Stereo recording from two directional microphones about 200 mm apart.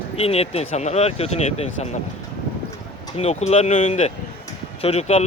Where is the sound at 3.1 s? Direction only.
30° left (ahead or behind).